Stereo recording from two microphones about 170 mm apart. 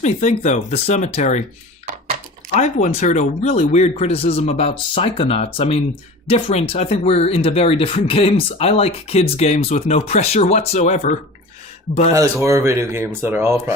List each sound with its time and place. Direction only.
0.0 s speech: 45° left (ahead or behind)
2.8 s speech: 45° left (ahead or behind)
12.1 s speech: 15° right (ahead or behind)